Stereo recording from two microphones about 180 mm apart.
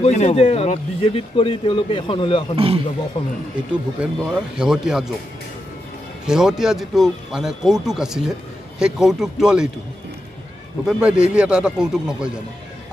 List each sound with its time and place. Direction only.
0.0 s speech: 35° left (ahead or behind)
2.5 s speech: 30° right (ahead or behind)
3.2 s speech: 30° left (ahead or behind)
4.0 s speech: 5° right (ahead or behind)
6.2 s speech: 5° right (ahead or behind)
10.9 s speech: 5° right (ahead or behind)